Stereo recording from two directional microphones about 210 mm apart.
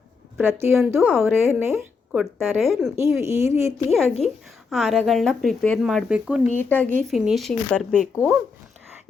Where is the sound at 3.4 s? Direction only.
15° right (ahead or behind).